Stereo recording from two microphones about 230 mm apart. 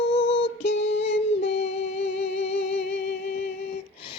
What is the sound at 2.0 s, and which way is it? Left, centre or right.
Music, left.